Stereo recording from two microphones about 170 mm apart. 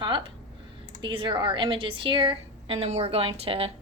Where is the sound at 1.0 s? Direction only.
30° right (ahead or behind).